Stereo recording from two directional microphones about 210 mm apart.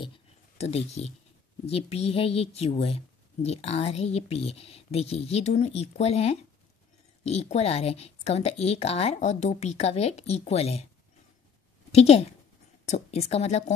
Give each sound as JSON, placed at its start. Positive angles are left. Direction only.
{"t": 0.6, "sound": "speech", "side_deg": 30}
{"t": 11.9, "sound": "speech", "side_deg": 30}